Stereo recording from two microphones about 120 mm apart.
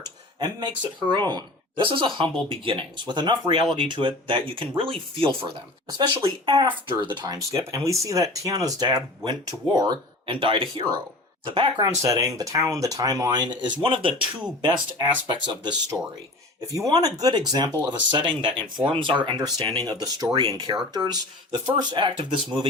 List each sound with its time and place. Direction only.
0.3 s speech: 35° right (ahead or behind)
12.0 s speech: 30° right (ahead or behind)
16.6 s speech: 30° right (ahead or behind)